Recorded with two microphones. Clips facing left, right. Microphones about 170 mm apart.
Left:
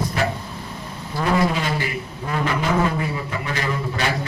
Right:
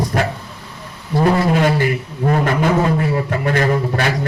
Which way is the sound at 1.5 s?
55° right (ahead or behind).